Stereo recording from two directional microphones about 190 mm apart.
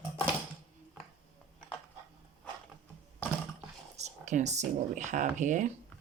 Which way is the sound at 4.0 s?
35° right (ahead or behind).